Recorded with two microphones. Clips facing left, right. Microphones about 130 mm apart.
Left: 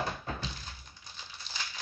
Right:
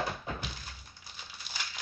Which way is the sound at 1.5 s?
10° right (ahead or behind).